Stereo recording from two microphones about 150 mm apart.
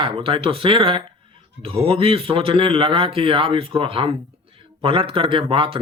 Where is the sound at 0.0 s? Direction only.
35° right (ahead or behind).